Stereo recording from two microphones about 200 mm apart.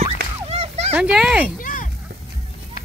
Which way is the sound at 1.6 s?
45° left (ahead or behind).